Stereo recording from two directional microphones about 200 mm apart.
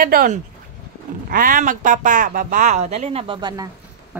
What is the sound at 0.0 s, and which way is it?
Speech, 45° right (ahead or behind).